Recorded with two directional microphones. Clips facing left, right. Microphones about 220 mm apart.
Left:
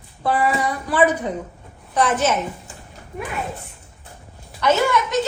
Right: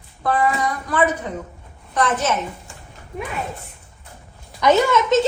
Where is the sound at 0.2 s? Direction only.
10° left (ahead or behind).